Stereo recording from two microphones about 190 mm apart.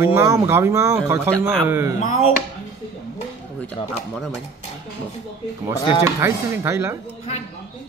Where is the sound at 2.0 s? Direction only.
35° left (ahead or behind).